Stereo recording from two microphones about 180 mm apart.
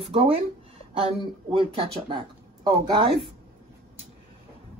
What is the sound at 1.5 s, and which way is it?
Speech, 30° right (ahead or behind).